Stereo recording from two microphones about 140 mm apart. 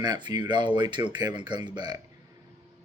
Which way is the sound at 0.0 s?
30° right (ahead or behind).